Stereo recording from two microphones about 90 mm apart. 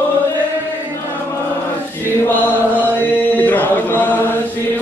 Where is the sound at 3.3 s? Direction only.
20° left (ahead or behind).